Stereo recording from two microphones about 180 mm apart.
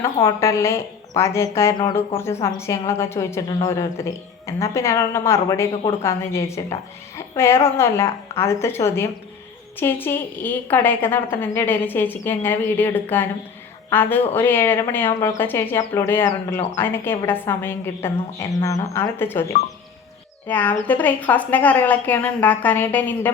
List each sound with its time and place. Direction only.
0.3 s speech: 15° left (ahead or behind)
20.5 s speech: 10° left (ahead or behind)